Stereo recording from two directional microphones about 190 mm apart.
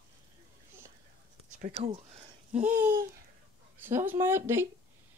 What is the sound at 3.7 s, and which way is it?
Speech, 10° right (ahead or behind).